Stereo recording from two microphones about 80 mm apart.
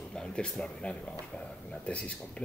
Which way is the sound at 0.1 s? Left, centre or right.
Centre.